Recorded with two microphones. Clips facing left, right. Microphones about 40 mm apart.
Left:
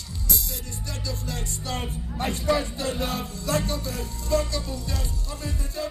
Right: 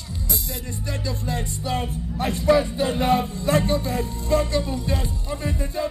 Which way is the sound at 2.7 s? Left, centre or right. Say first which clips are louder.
Right 8 dB; right.